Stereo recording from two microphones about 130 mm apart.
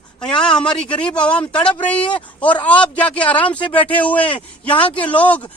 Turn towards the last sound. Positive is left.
turn(degrees=10)  # may be behind; listen again after turning